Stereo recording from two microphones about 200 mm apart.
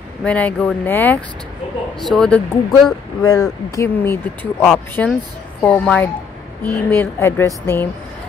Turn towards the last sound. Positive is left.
turn(degrees=10)  # may be behind; listen again after turning